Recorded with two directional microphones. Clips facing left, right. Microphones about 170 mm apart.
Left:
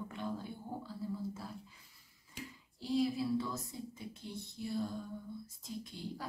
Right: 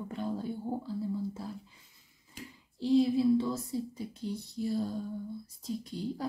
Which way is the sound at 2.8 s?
25° right (ahead or behind).